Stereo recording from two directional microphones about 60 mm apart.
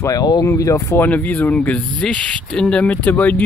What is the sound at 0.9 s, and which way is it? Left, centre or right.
Speech, left.